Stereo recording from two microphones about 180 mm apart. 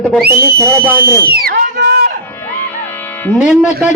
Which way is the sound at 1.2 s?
55° right (ahead or behind).